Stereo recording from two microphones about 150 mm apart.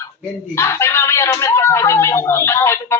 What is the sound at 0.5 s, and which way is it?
A man's voice, 15° left (ahead or behind).